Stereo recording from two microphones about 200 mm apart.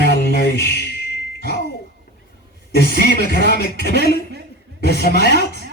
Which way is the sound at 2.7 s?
55° left (ahead or behind).